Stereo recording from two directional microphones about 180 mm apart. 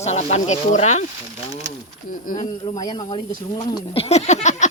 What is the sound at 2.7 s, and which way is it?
Speech, 20° left (ahead or behind).